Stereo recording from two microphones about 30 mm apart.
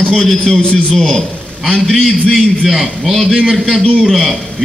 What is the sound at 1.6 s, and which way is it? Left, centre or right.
A man's voice, centre.